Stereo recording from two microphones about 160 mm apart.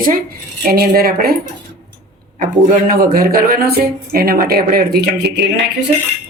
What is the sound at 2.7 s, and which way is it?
A man's voice, 55° right (ahead or behind).